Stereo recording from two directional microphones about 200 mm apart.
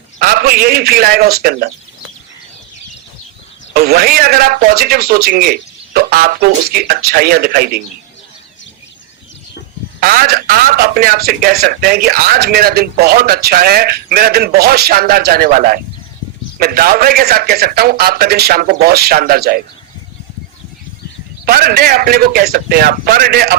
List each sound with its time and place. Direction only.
0.2 s a man's voice: 50° right (ahead or behind)
3.8 s a man's voice: 50° right (ahead or behind)
10.0 s a man's voice: 50° right (ahead or behind)
21.4 s a man's voice: 50° right (ahead or behind)